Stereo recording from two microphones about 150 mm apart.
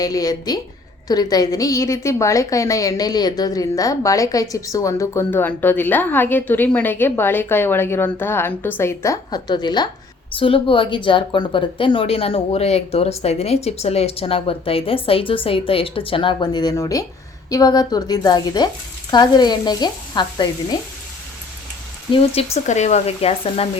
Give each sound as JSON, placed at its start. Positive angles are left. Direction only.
{"t": 0.0, "sound": "a woman's voice", "side_deg": 25}
{"t": 22.5, "sound": "speech", "side_deg": 50}